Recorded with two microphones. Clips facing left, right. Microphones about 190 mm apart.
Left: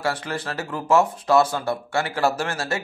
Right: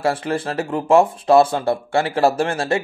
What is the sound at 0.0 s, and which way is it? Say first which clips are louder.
Speech: right 6 dB; 25° right (ahead or behind).